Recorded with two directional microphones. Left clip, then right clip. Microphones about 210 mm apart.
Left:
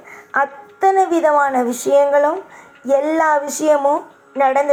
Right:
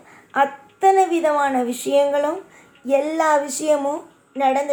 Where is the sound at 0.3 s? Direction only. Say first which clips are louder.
Left 1 dB; 15° right (ahead or behind).